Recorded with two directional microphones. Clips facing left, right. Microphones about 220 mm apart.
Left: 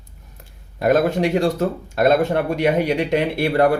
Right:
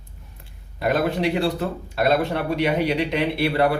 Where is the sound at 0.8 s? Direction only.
45° left (ahead or behind).